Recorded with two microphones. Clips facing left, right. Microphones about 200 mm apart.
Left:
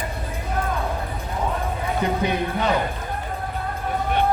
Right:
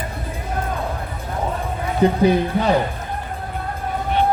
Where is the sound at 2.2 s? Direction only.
35° right (ahead or behind).